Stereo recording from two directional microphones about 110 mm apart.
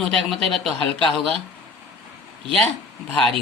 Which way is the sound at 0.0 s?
5° left (ahead or behind).